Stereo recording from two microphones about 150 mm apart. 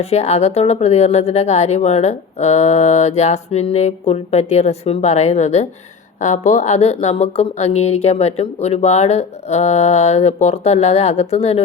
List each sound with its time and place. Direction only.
0.0 s speech: 45° left (ahead or behind)